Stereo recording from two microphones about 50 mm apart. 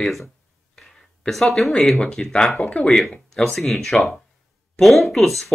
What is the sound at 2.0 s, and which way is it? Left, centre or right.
Speech, centre.